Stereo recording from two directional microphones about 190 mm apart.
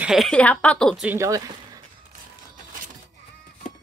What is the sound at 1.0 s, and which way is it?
Speech, 15° right (ahead or behind).